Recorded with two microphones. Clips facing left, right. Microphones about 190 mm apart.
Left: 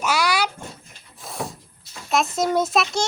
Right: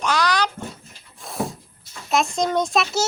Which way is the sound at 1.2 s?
Centre (ahead or behind).